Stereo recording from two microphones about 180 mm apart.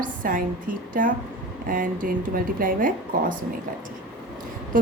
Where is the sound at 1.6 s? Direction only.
50° right (ahead or behind).